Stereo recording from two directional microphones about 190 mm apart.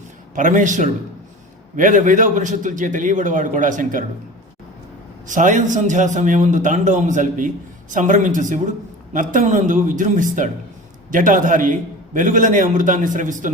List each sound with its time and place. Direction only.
0.3 s a man's voice: 40° right (ahead or behind)
5.2 s a man's voice: 40° right (ahead or behind)